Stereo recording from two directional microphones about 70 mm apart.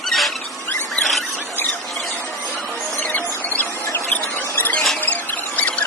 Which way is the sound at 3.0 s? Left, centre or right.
Left.